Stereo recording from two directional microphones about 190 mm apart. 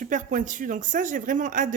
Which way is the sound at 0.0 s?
45° right (ahead or behind).